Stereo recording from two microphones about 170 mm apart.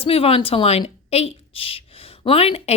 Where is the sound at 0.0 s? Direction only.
35° left (ahead or behind).